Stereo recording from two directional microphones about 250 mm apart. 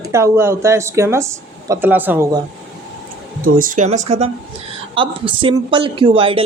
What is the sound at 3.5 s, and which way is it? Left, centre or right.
Speech, right.